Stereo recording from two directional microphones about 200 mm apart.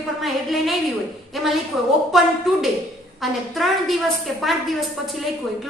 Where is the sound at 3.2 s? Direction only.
Centre (ahead or behind).